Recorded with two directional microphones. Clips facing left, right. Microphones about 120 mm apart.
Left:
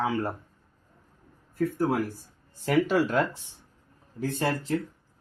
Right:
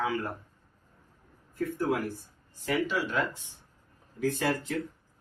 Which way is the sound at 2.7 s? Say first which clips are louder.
Left 6 dB; 45° left (ahead or behind).